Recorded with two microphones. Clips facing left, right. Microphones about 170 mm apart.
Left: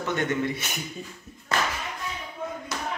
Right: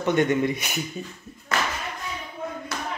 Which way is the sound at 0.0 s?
20° right (ahead or behind).